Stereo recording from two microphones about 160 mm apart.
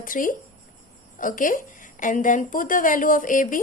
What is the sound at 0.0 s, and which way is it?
A woman's voice, 60° left (ahead or behind).